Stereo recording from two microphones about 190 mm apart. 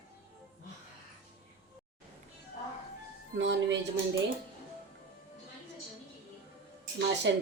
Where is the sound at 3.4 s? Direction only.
70° right (ahead or behind).